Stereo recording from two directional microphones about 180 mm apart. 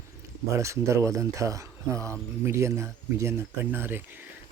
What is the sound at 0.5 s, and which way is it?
Speech, 15° right (ahead or behind).